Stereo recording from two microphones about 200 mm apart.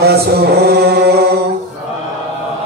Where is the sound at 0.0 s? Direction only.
55° right (ahead or behind).